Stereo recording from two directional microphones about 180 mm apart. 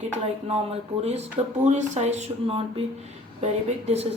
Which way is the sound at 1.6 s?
40° right (ahead or behind).